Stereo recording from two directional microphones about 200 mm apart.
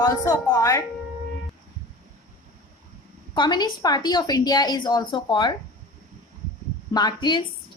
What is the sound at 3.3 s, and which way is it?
A woman's voice, 20° left (ahead or behind).